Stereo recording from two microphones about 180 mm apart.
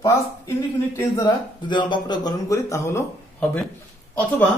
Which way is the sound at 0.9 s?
20° left (ahead or behind).